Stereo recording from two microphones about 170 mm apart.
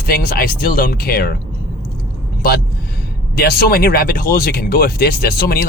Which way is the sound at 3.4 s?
65° left (ahead or behind).